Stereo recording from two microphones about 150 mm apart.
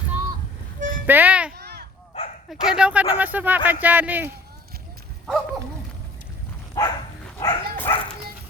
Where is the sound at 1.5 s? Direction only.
90° right.